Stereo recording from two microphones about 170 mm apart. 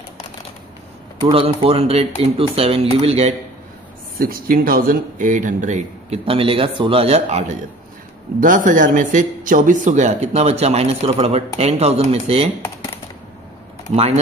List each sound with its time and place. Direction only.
1.2 s a man's voice: 35° right (ahead or behind)
4.2 s a man's voice: 55° right (ahead or behind); by 12.4 s 35° right (ahead or behind)
13.8 s a man's voice: 40° right (ahead or behind)